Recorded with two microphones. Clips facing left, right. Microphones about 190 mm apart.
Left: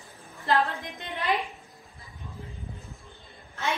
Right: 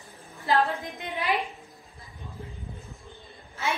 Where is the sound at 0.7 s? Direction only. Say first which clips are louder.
Right 3 dB; centre (ahead or behind).